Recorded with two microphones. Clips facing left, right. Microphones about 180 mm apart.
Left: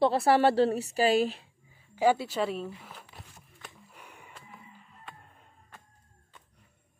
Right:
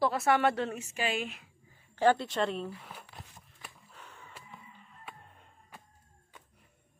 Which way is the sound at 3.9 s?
10° left (ahead or behind).